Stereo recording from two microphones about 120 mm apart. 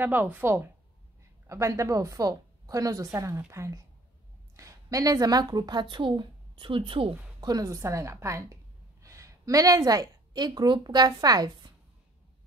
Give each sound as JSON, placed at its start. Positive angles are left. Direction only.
{"t": 0.0, "sound": "a woman's voice", "side_deg": -15}
{"t": 7.3, "sound": "a woman's voice", "side_deg": -30}